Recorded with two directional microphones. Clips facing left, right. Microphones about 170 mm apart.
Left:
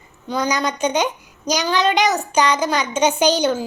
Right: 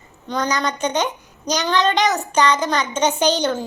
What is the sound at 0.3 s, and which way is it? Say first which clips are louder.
A child's voice: left 1 dB; 10° left (ahead or behind).